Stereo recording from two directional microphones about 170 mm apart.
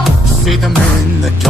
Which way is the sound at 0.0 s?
Centre (ahead or behind).